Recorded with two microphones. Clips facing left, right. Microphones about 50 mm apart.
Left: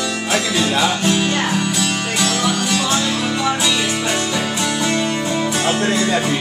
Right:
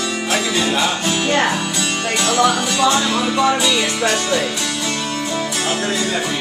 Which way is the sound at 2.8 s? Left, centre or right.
Centre.